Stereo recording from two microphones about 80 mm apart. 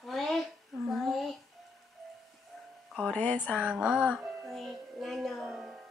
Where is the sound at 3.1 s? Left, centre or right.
Left.